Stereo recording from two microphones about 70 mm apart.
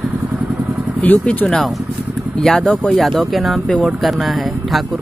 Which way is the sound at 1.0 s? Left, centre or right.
Left.